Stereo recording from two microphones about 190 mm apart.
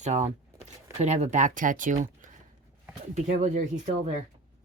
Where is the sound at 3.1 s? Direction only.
40° right (ahead or behind).